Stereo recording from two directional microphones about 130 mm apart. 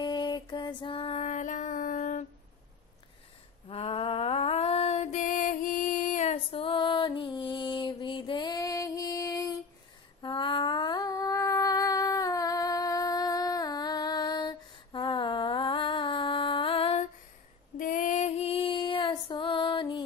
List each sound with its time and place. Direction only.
0.0 s female singing: 35° left (ahead or behind)
1.2 s music: 70° left (ahead or behind)
3.6 s lullaby: 45° left (ahead or behind); by 9.5 s 25° left (ahead or behind)
10.2 s a sound: 40° left (ahead or behind)
17.7 s female singing: 90° left; by 20.0 s 40° left (ahead or behind)